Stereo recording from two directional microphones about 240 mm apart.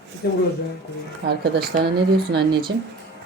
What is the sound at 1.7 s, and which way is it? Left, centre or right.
Speech, right.